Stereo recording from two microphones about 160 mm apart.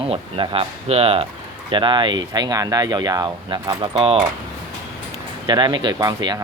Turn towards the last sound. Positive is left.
turn(degrees=-25)  # may be behind; listen again after turning